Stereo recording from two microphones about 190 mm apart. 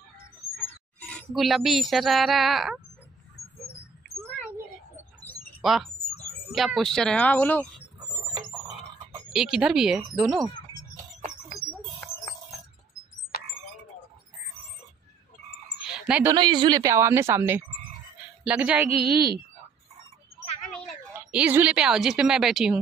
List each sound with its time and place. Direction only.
1.0 s speech: 5° left (ahead or behind)
5.6 s speech: centre (ahead or behind)
9.3 s speech: centre (ahead or behind)
15.8 s a sound: 5° right (ahead or behind)
16.3 s speech: 25° right (ahead or behind); by 19.0 s 5° right (ahead or behind)
19.0 s a woman's voice: 55° right (ahead or behind)
21.3 s speech: 10° right (ahead or behind)